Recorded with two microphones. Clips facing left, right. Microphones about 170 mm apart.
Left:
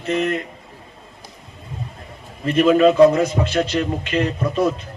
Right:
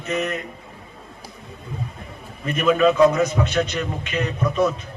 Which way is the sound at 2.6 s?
30° left (ahead or behind).